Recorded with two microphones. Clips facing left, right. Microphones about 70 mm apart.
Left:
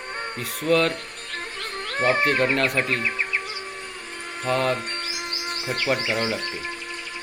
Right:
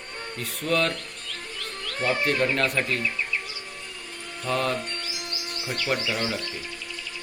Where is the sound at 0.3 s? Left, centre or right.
Centre.